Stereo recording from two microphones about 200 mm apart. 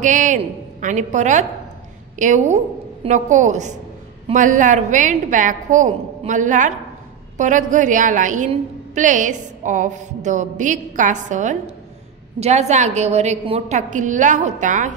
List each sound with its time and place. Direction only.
0.0 s a woman's voice: 40° right (ahead or behind)